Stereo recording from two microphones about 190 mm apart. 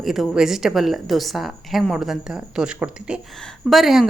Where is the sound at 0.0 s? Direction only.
Centre (ahead or behind).